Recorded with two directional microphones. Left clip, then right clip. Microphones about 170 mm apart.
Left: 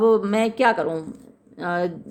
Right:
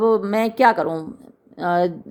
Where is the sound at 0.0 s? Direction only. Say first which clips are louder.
Even; 15° right (ahead or behind).